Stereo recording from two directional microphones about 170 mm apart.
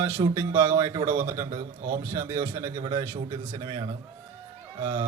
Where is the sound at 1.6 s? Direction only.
60° right (ahead or behind).